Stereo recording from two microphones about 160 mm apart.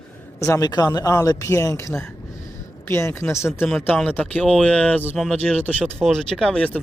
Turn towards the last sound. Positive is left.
turn(degrees=5)  # may be behind; listen again after turning